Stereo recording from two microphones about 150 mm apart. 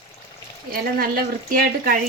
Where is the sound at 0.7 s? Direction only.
80° right.